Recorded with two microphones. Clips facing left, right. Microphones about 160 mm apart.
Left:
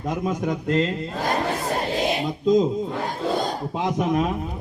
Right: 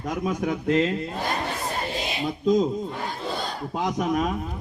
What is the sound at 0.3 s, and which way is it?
Speech, 5° right (ahead or behind).